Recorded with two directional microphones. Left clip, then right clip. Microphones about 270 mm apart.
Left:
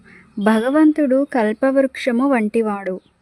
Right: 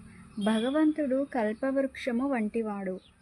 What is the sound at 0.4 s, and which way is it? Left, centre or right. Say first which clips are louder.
Speech: left 12 dB; left.